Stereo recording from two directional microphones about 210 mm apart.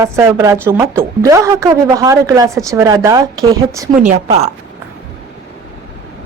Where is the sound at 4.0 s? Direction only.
30° right (ahead or behind).